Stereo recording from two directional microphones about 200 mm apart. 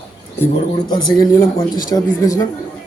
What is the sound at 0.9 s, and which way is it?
A man's voice, 20° left (ahead or behind).